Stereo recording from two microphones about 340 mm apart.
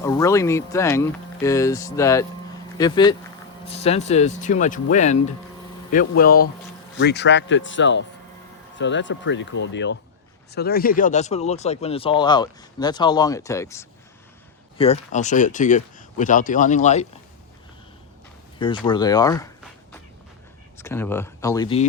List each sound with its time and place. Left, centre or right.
0.0 s speech: centre
18.6 s speech: centre
20.7 s speech: centre